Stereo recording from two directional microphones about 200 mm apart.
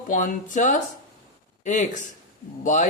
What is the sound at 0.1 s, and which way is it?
Speech, 40° left (ahead or behind).